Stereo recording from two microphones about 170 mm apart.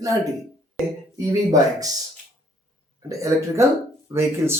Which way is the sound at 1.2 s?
20° right (ahead or behind).